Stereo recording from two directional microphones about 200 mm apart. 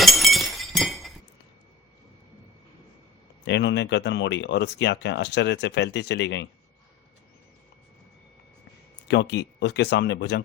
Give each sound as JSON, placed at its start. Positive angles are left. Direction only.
{"t": 0.0, "sound": "glass", "side_deg": 0}
{"t": 3.4, "sound": "speech", "side_deg": 60}
{"t": 9.0, "sound": "speech", "side_deg": 60}